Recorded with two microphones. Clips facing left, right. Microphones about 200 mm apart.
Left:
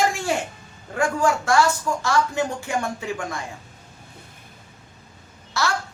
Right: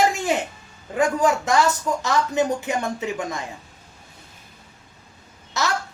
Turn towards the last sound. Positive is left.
turn(degrees=-20)  # may be behind; listen again after turning